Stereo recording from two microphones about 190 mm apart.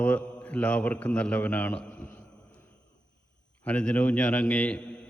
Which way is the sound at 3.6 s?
5° left (ahead or behind).